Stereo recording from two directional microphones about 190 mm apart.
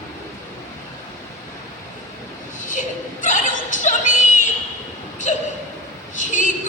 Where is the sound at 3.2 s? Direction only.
45° left (ahead or behind).